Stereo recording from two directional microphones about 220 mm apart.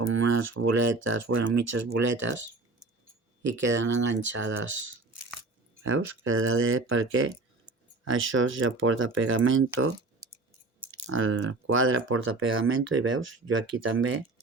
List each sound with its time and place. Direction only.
0.0 s speech: 60° right (ahead or behind)
3.6 s speech: 55° right (ahead or behind)
5.8 s speech: 65° right (ahead or behind)